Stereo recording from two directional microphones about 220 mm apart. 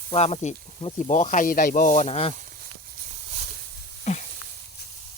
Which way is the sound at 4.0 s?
30° left (ahead or behind).